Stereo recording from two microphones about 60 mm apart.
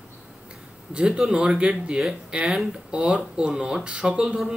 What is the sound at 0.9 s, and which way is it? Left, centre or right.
Speech, centre.